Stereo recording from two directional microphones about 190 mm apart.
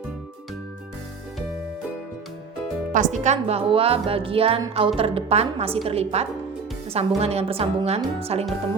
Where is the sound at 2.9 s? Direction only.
40° right (ahead or behind).